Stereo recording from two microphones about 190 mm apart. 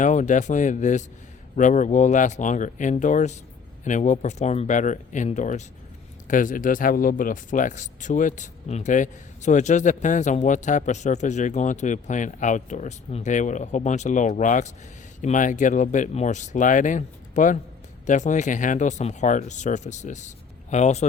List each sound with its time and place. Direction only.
0.0 s speech: 40° left (ahead or behind)